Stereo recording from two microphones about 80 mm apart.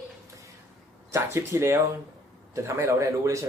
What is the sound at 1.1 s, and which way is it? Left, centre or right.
A man's voice, right.